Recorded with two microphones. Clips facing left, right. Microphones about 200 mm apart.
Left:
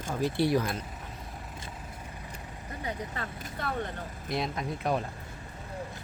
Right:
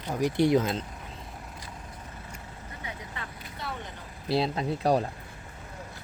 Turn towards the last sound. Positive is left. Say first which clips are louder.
# right 5 dB
turn(degrees=-35)  # may be behind; listen again after turning